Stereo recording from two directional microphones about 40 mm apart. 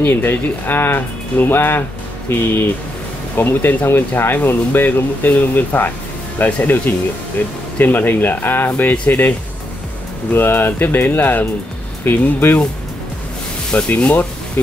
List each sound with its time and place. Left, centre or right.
0.0 s speech: left
10.3 s speech: left
13.7 s speech: left